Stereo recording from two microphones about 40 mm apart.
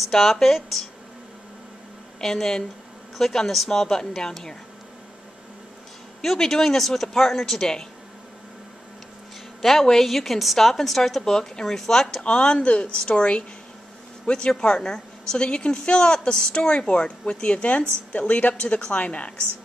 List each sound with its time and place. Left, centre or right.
0.0 s a woman's voice: centre
2.1 s speech: centre
6.2 s speech: centre
9.6 s a woman's voice: centre
12.2 s a woman's voice: left